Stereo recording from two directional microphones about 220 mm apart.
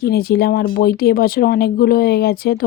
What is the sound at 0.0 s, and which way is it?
Speech, 45° left (ahead or behind).